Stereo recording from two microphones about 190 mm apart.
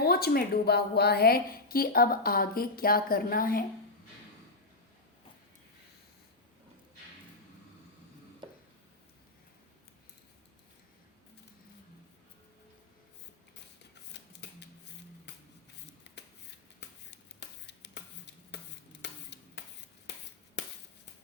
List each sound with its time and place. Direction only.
0.0 s a woman's voice: 55° left (ahead or behind)
14.1 s a sound: 65° left (ahead or behind)
16.1 s shuffling cards: 65° left (ahead or behind)
16.8 s hands: 65° left (ahead or behind)
19.0 s a sound: 65° left (ahead or behind)
20.6 s chop: 65° left (ahead or behind)